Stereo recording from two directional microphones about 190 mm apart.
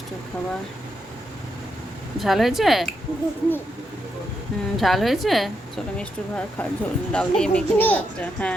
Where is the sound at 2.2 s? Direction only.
Centre (ahead or behind).